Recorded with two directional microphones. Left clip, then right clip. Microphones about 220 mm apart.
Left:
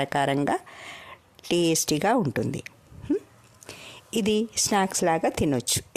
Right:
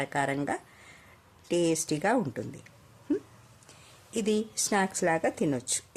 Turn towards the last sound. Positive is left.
turn(degrees=40)  # may be behind; listen again after turning